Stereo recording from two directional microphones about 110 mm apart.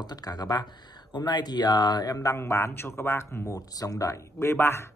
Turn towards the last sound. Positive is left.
turn(degrees=25)  # may be behind; listen again after turning